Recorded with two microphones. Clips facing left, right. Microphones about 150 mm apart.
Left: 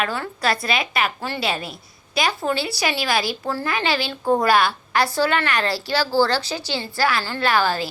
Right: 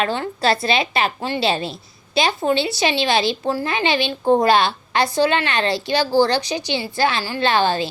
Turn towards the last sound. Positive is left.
turn(degrees=-25)  # may be behind; listen again after turning